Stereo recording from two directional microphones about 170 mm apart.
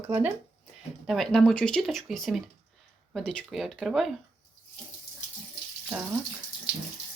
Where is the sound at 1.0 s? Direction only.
Centre (ahead or behind).